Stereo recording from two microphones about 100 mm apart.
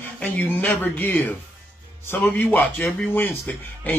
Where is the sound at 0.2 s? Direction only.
15° left (ahead or behind).